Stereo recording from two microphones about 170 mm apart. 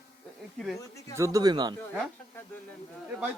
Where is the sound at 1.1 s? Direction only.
20° right (ahead or behind).